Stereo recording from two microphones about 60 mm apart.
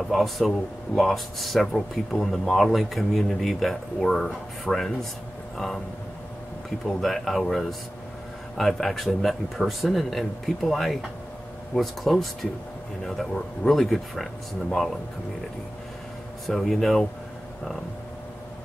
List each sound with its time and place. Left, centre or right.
0.1 s speech: centre
6.9 s speech: centre
16.4 s speech: centre